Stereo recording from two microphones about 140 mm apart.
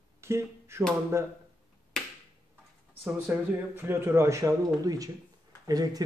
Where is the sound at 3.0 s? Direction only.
15° right (ahead or behind).